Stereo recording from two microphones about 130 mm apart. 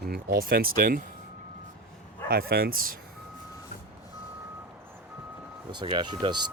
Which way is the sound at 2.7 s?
90° right.